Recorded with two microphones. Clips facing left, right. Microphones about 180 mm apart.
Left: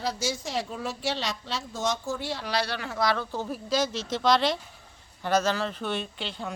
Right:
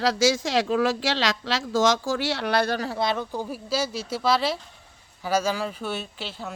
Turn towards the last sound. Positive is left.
turn(degrees=-5)  # may be behind; listen again after turning